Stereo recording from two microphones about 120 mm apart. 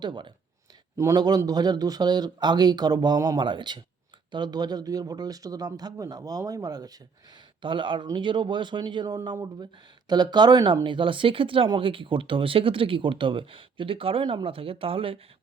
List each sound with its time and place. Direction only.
0.0 s speech: 40° right (ahead or behind)
0.9 s speech: 30° right (ahead or behind)
7.6 s speech: 45° right (ahead or behind)